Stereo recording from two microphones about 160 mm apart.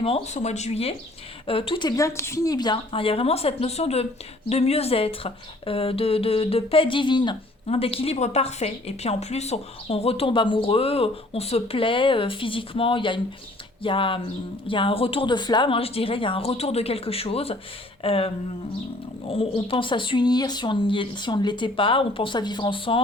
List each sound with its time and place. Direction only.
0.0 s speech: 40° left (ahead or behind)
19.3 s speech: 35° left (ahead or behind)